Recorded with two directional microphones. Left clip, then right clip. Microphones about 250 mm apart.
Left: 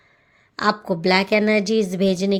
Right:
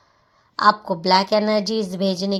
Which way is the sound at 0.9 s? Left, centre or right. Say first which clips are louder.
Right 1 dB; left.